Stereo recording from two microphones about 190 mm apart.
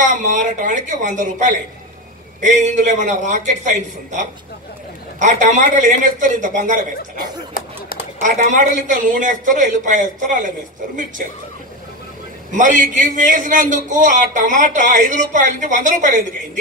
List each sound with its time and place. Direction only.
0.0 s a man's voice: 40° right (ahead or behind)
8.2 s speech: 40° right (ahead or behind)
12.4 s a man's voice: 40° right (ahead or behind)